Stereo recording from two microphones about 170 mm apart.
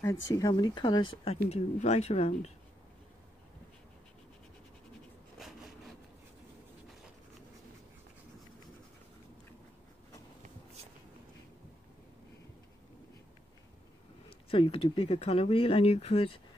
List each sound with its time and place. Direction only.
0.3 s speech: 25° left (ahead or behind)
14.5 s speech: 35° left (ahead or behind)